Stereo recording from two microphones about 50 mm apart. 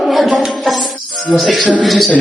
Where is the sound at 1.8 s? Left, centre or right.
Centre.